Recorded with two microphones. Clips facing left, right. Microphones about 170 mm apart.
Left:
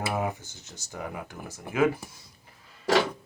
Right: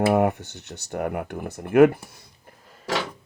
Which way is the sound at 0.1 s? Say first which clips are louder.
Right 10 dB; 65° right (ahead or behind).